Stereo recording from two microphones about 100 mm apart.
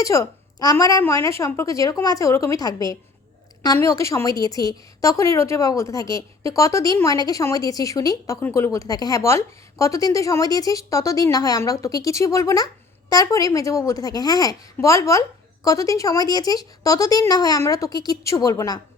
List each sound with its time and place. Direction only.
0.0 s a woman's voice: 35° left (ahead or behind)
8.4 s a woman's voice: 25° left (ahead or behind)